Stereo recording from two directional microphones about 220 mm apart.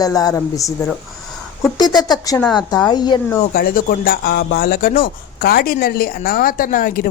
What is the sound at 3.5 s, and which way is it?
Speech, 40° left (ahead or behind).